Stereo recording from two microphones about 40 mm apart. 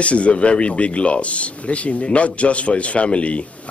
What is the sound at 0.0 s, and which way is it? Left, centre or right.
Speech, left.